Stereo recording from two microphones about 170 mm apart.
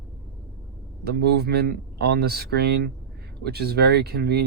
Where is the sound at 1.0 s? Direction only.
70° right (ahead or behind).